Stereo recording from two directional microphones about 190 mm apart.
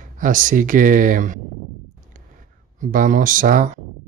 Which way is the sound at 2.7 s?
45° right (ahead or behind).